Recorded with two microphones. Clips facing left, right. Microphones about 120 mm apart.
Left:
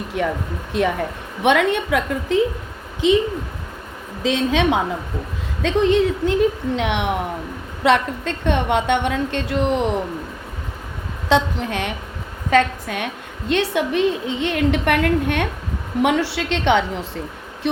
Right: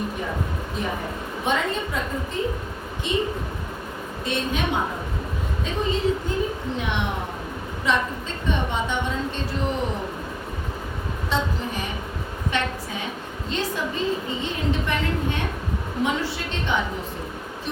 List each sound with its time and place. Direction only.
0.7 s a woman's voice: 80° left
3.0 s a woman's voice: 90° left
4.2 s a woman's voice: 90° left
5.6 s a woman's voice: 75° left (ahead or behind)
11.3 s a woman's voice: 75° left (ahead or behind)